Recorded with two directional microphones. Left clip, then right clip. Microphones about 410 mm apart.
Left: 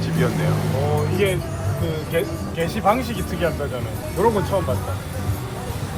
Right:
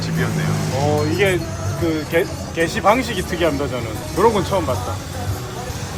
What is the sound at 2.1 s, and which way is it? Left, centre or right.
Speech, right.